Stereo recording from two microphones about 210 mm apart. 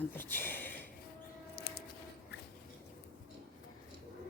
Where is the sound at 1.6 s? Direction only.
45° left (ahead or behind).